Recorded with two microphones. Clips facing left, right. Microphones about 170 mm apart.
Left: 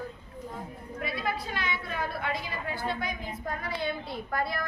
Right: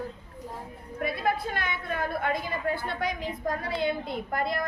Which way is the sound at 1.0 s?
50° right (ahead or behind).